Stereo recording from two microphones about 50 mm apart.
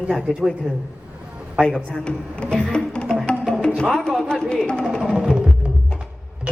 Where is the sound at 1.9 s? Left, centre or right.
Centre.